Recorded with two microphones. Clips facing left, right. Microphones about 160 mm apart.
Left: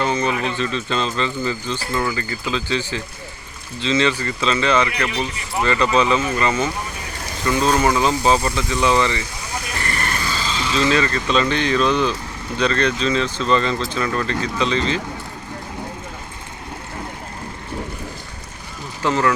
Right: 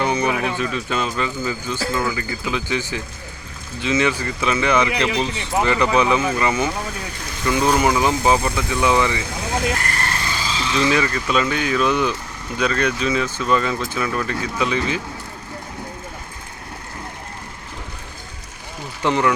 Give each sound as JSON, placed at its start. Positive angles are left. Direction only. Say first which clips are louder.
{"t": 0.0, "sound": "speech", "louder": "even", "side_deg": -15}
{"t": 5.0, "sound": "speech", "louder": "right 3 dB", "side_deg": -85}
{"t": 5.5, "sound": "speech", "louder": "even", "side_deg": -15}
{"t": 9.4, "sound": "vehicle", "louder": "right 8 dB", "side_deg": -75}
{"t": 10.8, "sound": "speech", "louder": "left 1 dB", "side_deg": -15}
{"t": 19.0, "sound": "speech", "louder": "even", "side_deg": -15}